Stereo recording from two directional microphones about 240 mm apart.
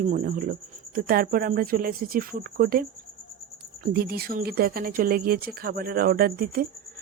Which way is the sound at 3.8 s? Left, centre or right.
Right.